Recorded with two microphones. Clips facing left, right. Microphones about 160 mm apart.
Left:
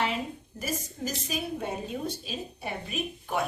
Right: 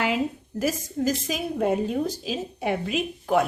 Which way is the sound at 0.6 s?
90° right.